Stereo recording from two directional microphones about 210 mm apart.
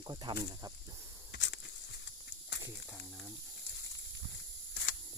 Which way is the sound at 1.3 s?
55° left (ahead or behind).